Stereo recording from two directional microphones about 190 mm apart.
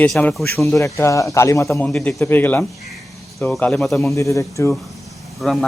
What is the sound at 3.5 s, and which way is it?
Speech, 5° left (ahead or behind).